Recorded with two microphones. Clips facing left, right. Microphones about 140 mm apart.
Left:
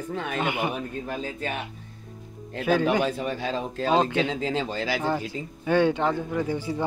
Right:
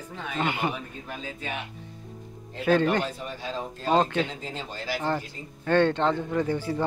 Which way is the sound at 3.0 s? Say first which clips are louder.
Left 6 dB; 70° left (ahead or behind).